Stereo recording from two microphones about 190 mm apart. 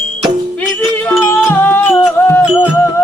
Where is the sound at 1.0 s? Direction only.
5° left (ahead or behind).